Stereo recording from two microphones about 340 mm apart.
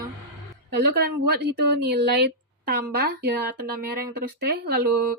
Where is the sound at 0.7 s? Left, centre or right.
Right.